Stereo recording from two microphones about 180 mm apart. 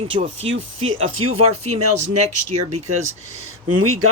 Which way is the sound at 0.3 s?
90° right.